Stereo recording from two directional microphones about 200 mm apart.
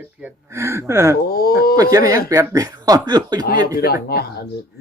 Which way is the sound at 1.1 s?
50° left (ahead or behind).